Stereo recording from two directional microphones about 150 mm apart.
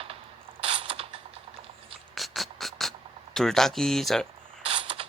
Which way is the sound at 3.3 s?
5° left (ahead or behind).